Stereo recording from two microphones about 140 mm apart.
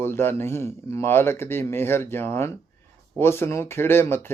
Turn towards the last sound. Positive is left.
turn(degrees=15)  # may be behind; listen again after turning